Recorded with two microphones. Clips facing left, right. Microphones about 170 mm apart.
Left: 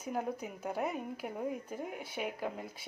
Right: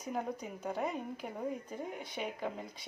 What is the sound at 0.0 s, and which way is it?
Speech, 5° left (ahead or behind).